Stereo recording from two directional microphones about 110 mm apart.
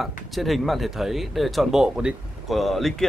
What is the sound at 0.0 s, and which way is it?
Speech, centre (ahead or behind).